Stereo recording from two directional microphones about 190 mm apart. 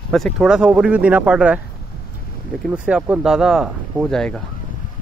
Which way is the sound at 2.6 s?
5° right (ahead or behind).